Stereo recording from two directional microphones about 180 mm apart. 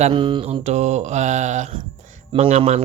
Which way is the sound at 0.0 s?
25° right (ahead or behind).